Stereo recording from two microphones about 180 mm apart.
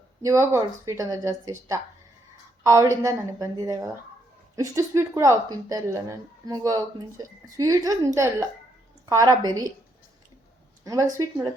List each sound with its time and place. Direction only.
0.2 s speech: 15° right (ahead or behind)
10.8 s speech: 20° right (ahead or behind)